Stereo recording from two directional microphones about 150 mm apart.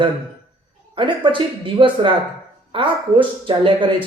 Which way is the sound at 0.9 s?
35° right (ahead or behind).